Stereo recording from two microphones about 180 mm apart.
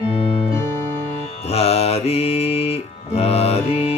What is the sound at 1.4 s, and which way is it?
Music, 35° left (ahead or behind).